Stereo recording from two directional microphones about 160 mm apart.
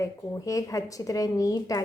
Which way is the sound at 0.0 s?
20° left (ahead or behind).